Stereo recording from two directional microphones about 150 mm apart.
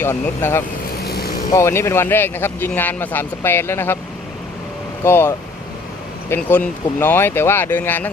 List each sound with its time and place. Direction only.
0.0 s speech: 15° left (ahead or behind)
1.0 s boat: 90° left
1.5 s speech: 20° left (ahead or behind)
5.0 s speech: 15° left (ahead or behind)
6.3 s speech: 15° left (ahead or behind)